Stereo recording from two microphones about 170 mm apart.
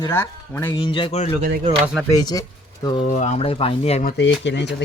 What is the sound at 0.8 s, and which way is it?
Speech, 30° left (ahead or behind).